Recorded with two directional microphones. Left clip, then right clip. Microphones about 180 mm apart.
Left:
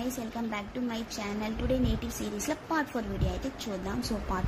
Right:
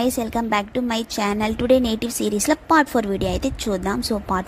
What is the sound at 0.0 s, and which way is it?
A woman's voice, 60° right (ahead or behind).